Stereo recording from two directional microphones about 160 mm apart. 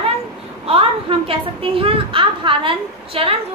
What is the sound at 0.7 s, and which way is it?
A woman's voice, 35° right (ahead or behind).